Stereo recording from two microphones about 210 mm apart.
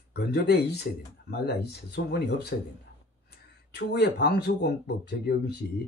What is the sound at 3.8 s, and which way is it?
Speech, 50° left (ahead or behind).